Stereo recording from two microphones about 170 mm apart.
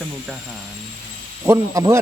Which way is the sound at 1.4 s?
20° right (ahead or behind).